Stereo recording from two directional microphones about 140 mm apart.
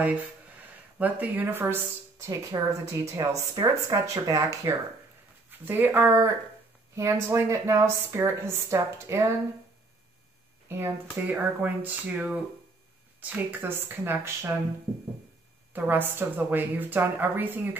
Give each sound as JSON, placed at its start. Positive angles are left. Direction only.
{"t": 0.9, "sound": "a woman's voice", "side_deg": -10}
{"t": 10.7, "sound": "a woman's voice", "side_deg": -20}
{"t": 15.7, "sound": "a woman's voice", "side_deg": -15}